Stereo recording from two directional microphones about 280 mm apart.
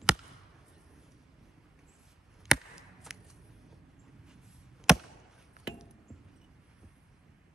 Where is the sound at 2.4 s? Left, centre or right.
Centre.